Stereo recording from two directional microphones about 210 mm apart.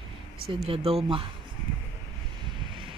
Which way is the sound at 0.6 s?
25° right (ahead or behind).